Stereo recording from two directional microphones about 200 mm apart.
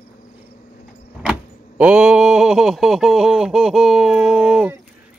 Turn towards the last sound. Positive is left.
turn(degrees=0)  # may be behind; listen again after turning